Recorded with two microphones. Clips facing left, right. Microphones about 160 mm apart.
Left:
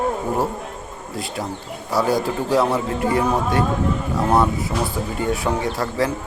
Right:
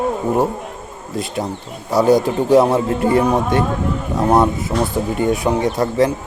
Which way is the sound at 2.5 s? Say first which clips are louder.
Right 7 dB; 25° right (ahead or behind).